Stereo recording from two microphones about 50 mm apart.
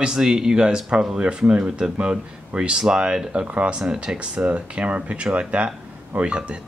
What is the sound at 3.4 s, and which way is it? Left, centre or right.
Speech, right.